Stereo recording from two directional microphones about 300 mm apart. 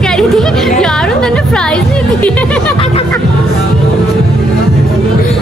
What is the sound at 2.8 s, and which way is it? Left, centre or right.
Music, centre.